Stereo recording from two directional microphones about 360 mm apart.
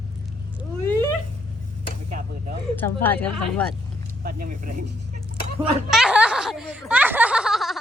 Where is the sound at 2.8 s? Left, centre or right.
Centre.